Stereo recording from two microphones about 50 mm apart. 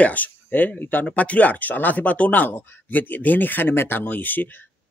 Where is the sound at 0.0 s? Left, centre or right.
Left.